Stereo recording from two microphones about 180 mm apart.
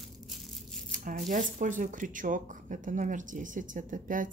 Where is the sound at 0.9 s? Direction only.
45° right (ahead or behind).